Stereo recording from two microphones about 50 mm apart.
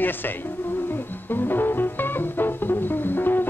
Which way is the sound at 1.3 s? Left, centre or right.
Left.